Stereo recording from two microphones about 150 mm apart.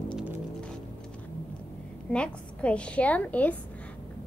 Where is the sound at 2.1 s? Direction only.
10° left (ahead or behind).